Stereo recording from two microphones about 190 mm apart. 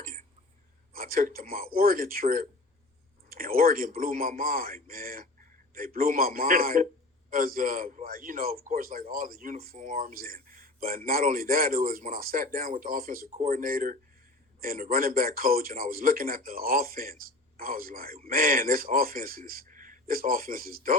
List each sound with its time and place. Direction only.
0.9 s a man's voice: 50° right (ahead or behind)